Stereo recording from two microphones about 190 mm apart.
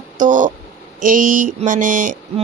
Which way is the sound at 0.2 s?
40° right (ahead or behind).